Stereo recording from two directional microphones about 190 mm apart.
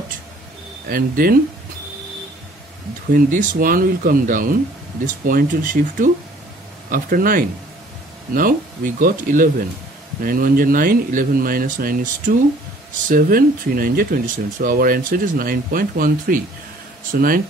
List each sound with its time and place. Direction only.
0.8 s speech: 50° right (ahead or behind)
3.1 s speech: 45° right (ahead or behind)